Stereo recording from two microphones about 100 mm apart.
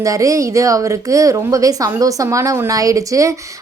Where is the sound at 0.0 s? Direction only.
35° right (ahead or behind).